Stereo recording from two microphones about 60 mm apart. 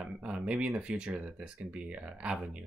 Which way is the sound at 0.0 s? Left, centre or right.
Centre.